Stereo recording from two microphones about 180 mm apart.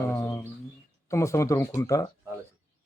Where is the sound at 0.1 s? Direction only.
15° left (ahead or behind).